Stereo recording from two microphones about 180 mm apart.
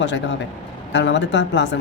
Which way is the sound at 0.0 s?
90° left.